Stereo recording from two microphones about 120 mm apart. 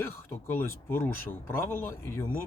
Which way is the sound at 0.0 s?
20° left (ahead or behind).